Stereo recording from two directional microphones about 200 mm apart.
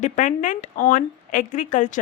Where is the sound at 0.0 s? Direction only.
40° left (ahead or behind).